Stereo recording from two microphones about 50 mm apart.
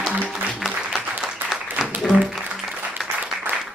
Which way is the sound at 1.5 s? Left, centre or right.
Centre.